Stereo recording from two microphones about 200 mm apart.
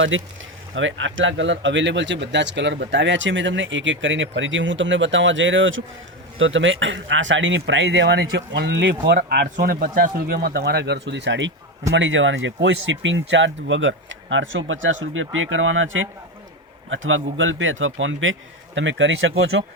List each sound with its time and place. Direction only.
0.1 s speech: 80° right; by 9.1 s 65° right (ahead or behind)
9.1 s speech: 45° right (ahead or behind); by 19.6 s 70° right (ahead or behind)